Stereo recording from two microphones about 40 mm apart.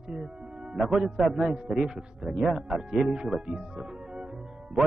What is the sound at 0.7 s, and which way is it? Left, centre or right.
Speech, centre.